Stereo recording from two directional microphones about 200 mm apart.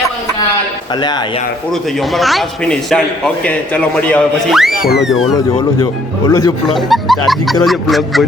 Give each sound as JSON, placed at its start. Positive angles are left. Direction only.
{"t": 0.9, "sound": "speech", "side_deg": 20}
{"t": 1.7, "sound": "a man's voice", "side_deg": 0}
{"t": 5.5, "sound": "speech", "side_deg": 20}
{"t": 6.7, "sound": "a man's voice", "side_deg": 0}